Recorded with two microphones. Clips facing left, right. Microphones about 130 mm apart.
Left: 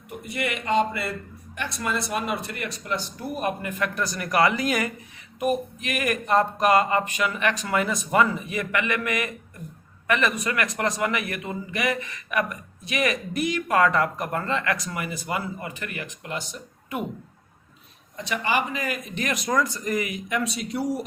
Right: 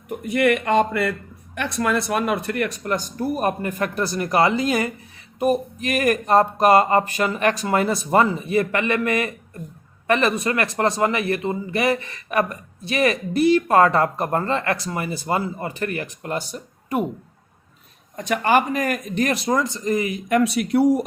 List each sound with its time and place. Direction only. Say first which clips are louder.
0.3 s a man's voice: right 8 dB; 55° right (ahead or behind); by 17.1 s 40° right (ahead or behind)
18.2 s a man's voice: right 7 dB; 50° right (ahead or behind); by 20.2 s 30° right (ahead or behind)
20.2 s speech: right 8 dB; 55° right (ahead or behind)